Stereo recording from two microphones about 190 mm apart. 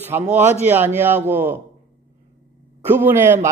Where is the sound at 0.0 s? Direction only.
10° right (ahead or behind).